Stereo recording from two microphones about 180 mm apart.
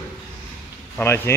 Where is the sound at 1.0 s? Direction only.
15° left (ahead or behind).